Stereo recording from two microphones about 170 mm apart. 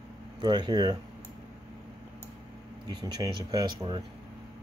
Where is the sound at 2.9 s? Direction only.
25° right (ahead or behind).